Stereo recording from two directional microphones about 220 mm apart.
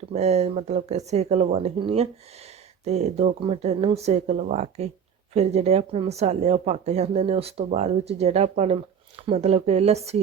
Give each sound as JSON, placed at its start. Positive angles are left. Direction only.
{"t": 0.1, "sound": "speech", "side_deg": -30}